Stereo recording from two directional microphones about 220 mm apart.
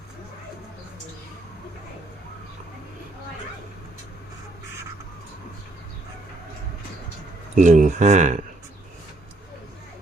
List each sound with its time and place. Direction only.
7.5 s speech: 35° right (ahead or behind)